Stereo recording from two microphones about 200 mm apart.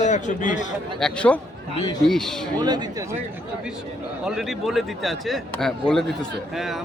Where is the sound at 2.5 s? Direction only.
20° right (ahead or behind).